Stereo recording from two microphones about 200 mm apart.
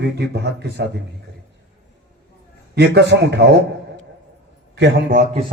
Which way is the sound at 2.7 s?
55° right (ahead or behind).